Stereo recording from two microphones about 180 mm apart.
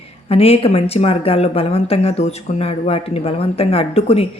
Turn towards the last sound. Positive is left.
turn(degrees=35)  # may be behind; listen again after turning